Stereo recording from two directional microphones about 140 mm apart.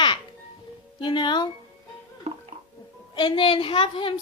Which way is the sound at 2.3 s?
50° right (ahead or behind).